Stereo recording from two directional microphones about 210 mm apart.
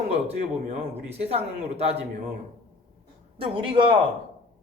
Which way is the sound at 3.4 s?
25° right (ahead or behind).